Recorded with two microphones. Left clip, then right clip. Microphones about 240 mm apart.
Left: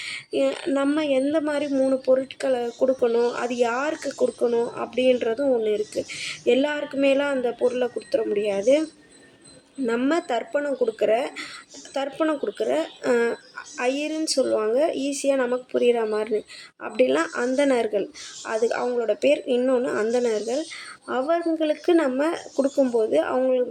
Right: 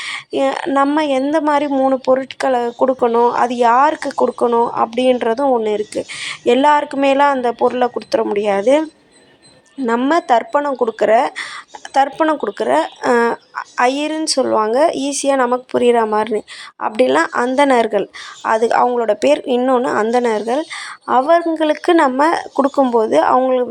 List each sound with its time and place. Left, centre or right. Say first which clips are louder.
0.0 s speech: right 6 dB; right
9.8 s speech: right 8 dB; centre